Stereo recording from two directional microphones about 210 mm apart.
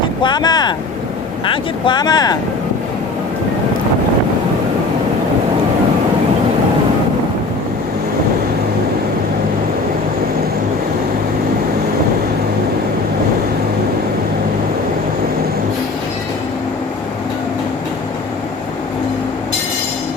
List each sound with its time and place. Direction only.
0.2 s speech: 20° left (ahead or behind)